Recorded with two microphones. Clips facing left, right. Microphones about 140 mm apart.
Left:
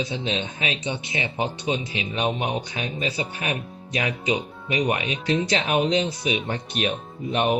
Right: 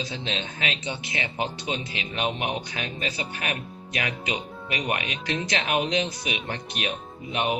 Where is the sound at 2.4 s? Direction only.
25° left (ahead or behind).